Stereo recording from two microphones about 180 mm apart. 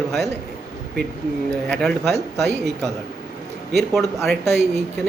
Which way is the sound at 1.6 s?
5° left (ahead or behind).